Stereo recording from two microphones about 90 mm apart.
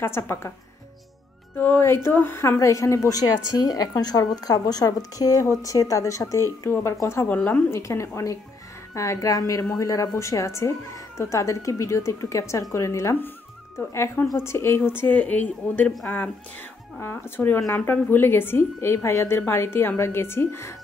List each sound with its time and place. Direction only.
0.0 s a woman's voice: 25° left (ahead or behind)
1.6 s a woman's voice: 25° left (ahead or behind)
7.2 s speech: 15° left (ahead or behind)
7.7 s a woman's voice: 30° left (ahead or behind)
17.0 s a woman's voice: 25° left (ahead or behind)